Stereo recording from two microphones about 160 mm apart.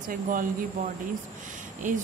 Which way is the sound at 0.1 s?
55° right (ahead or behind).